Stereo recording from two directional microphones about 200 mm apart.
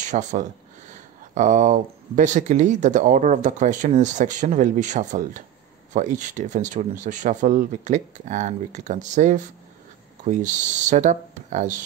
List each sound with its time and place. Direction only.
0.0 s speech: 35° right (ahead or behind)